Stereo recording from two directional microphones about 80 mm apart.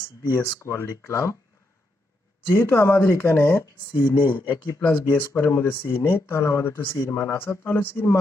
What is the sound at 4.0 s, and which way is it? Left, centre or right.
Speech, left.